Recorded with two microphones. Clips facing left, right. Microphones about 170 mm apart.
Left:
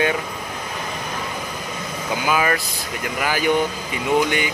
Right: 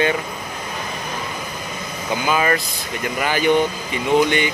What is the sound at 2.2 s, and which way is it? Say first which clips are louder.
Speech: right 1 dB; 10° left (ahead or behind).